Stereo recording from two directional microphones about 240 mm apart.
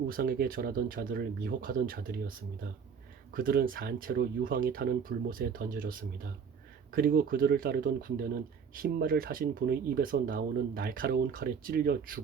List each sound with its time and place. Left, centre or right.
0.1 s speech: right
3.3 s speech: right